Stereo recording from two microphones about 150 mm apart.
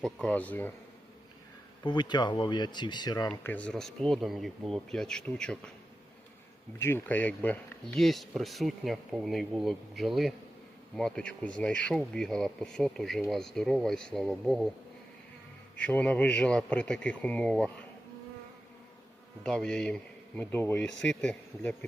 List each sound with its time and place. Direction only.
0.0 s speech: 5° left (ahead or behind)
1.8 s speech: 30° left (ahead or behind)
3.3 s speech: 15° left (ahead or behind)
6.7 s speech: 15° left (ahead or behind)
15.8 s speech: 10° left (ahead or behind)
19.4 s speech: 5° left (ahead or behind)